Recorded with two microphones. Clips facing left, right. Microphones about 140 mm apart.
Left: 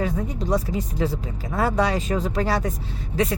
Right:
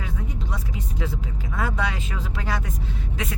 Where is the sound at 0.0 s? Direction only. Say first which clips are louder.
Left 8 dB; 40° left (ahead or behind).